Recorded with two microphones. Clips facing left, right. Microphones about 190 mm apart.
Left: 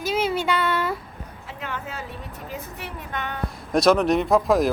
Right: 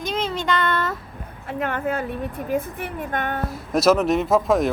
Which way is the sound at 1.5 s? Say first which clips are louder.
Right 10 dB; 55° right (ahead or behind).